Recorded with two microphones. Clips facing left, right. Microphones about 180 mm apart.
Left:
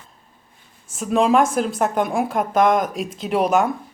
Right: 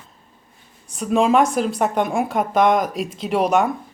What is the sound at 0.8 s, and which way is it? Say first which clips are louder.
Speech: even; centre (ahead or behind).